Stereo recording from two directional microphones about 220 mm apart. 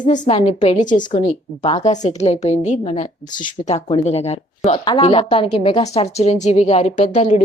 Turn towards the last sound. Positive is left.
turn(degrees=30)  # may be behind; listen again after turning